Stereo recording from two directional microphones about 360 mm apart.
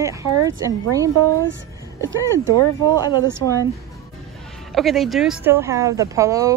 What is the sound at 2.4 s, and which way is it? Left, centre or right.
Speech, right.